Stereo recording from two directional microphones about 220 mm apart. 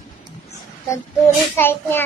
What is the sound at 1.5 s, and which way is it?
Speech, 10° left (ahead or behind).